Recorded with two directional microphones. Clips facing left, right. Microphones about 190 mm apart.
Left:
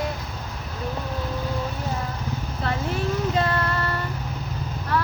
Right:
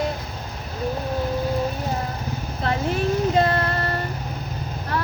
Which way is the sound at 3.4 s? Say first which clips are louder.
Right 3 dB; 40° right (ahead or behind).